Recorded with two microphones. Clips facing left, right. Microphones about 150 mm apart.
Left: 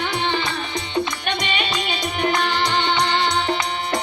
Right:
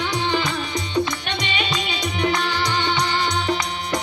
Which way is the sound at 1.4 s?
50° left (ahead or behind).